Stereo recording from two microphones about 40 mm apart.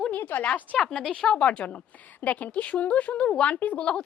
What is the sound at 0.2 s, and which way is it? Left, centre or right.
Speech, left.